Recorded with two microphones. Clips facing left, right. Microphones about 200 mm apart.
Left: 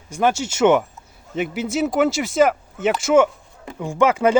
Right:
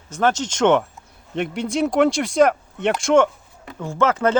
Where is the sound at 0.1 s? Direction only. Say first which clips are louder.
Even; 10° left (ahead or behind).